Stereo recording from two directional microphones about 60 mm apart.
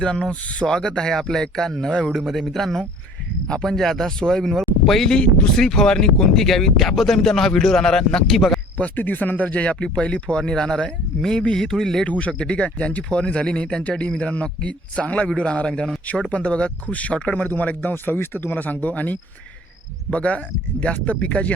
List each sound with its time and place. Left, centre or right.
0.0 s speech: centre
8.8 s speech: left; by 12.0 s centre
12.0 s speech: left